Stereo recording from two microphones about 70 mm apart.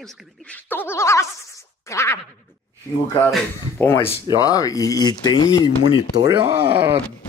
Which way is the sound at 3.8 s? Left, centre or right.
Left.